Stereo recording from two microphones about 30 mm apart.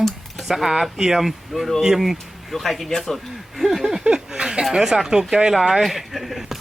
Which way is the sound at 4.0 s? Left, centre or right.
Right.